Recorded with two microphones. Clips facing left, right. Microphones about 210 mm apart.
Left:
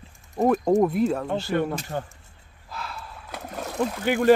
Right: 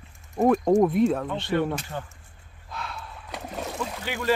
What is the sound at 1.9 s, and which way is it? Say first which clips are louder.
Speech: left 4 dB; 45° left (ahead or behind).